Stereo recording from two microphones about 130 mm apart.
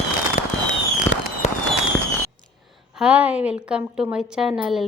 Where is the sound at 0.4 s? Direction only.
90° left.